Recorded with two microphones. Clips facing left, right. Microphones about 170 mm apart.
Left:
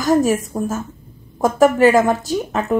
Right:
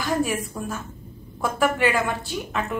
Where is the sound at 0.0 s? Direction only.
40° left (ahead or behind).